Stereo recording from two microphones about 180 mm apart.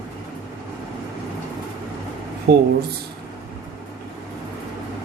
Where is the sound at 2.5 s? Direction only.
65° right (ahead or behind).